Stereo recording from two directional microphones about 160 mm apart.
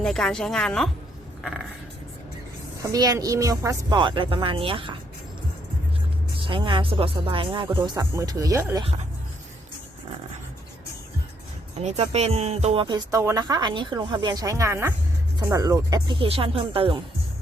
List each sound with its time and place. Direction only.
0.0 s speech: centre (ahead or behind)
2.8 s speech: 20° right (ahead or behind)
6.4 s speech: 35° right (ahead or behind)
7.9 s speech: 20° right (ahead or behind)
11.8 s speech: 45° right (ahead or behind)